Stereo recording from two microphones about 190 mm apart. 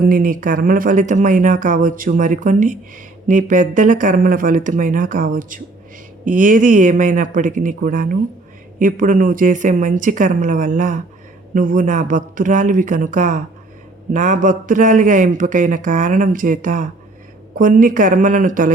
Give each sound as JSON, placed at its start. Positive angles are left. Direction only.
{"t": 0.0, "sound": "a man's voice", "side_deg": -45}